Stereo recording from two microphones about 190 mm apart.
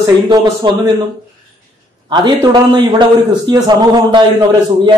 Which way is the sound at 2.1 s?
25° right (ahead or behind).